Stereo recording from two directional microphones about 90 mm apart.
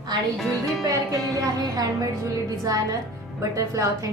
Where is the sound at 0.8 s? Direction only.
40° right (ahead or behind).